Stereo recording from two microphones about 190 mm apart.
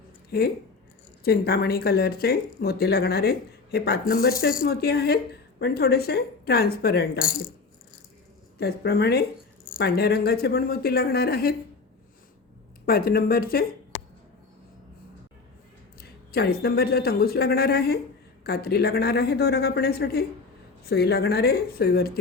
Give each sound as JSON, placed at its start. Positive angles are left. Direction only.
{"t": 0.3, "sound": "speech", "side_deg": 55}
{"t": 8.5, "sound": "speech", "side_deg": 55}
{"t": 12.8, "sound": "speech", "side_deg": 50}
{"t": 16.0, "sound": "speech", "side_deg": 55}